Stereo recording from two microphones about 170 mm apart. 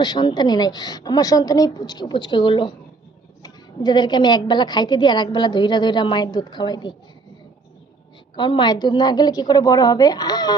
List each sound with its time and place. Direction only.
0.0 s a woman's voice: 25° left (ahead or behind)
8.4 s a woman's voice: 25° left (ahead or behind)